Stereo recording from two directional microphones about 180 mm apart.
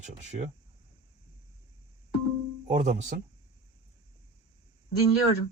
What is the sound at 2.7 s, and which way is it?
Speech, 40° right (ahead or behind).